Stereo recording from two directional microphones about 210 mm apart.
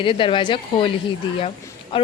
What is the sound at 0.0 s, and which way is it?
Speech, 25° left (ahead or behind).